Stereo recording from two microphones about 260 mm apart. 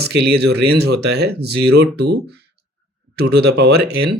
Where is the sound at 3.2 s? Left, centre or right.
Right.